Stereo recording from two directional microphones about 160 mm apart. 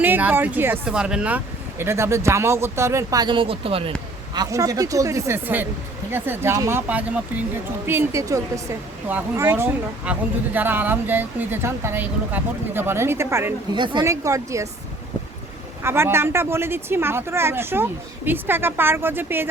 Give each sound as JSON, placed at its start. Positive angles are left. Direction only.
{"t": 0.0, "sound": "speech", "side_deg": -10}
{"t": 4.4, "sound": "speech", "side_deg": -20}
{"t": 13.7, "sound": "speech", "side_deg": -30}
{"t": 14.0, "sound": "speech", "side_deg": -20}
{"t": 15.8, "sound": "speech", "side_deg": -15}